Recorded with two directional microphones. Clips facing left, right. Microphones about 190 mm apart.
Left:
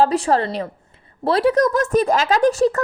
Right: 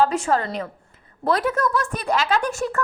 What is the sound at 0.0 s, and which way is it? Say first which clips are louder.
Speech: left 3 dB; 35° left (ahead or behind).